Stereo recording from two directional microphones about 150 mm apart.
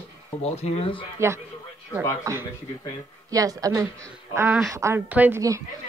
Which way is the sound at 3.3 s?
25° right (ahead or behind).